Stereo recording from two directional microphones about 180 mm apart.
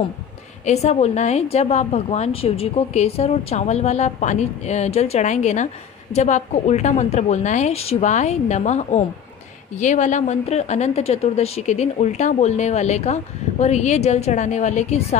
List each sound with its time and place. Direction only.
0.7 s speech: 40° left (ahead or behind)